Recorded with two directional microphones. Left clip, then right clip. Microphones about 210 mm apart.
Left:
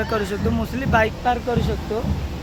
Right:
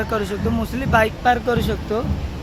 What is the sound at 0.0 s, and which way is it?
Speech, 10° right (ahead or behind).